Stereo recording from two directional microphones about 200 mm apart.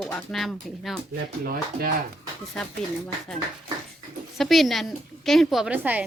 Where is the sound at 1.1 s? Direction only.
50° right (ahead or behind).